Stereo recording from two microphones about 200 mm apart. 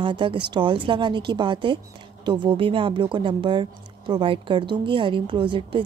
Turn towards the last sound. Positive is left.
turn(degrees=-25)  # may be behind; listen again after turning